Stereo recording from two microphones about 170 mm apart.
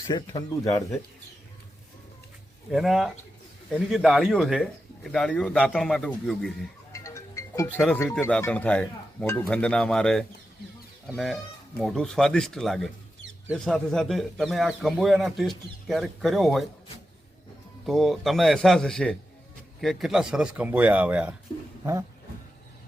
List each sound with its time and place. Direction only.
0.1 s speech: 20° left (ahead or behind)
2.7 s a man's voice: centre (ahead or behind)
6.9 s music: 20° left (ahead or behind)
8.2 s a man's voice: 15° left (ahead or behind)
11.8 s a man's voice: centre (ahead or behind)
17.8 s a man's voice: centre (ahead or behind)